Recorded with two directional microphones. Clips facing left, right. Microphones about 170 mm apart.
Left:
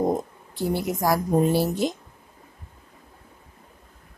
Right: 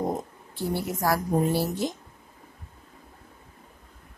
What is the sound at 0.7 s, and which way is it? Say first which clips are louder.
Speech: left 3 dB; 15° left (ahead or behind).